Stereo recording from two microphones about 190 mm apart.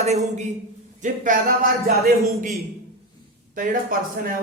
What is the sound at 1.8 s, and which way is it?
Speech, 55° right (ahead or behind).